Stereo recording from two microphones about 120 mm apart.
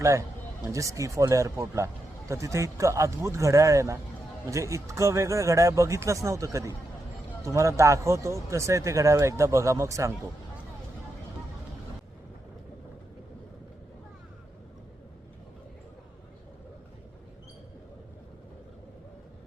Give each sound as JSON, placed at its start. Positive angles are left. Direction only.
{"t": 0.0, "sound": "speech", "side_deg": -25}